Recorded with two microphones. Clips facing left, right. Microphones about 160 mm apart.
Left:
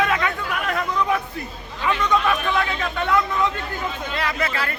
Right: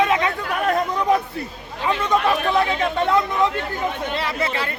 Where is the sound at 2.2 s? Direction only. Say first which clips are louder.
Right 3 dB; 35° right (ahead or behind).